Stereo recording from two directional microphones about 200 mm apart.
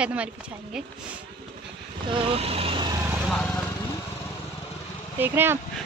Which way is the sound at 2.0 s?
25° right (ahead or behind).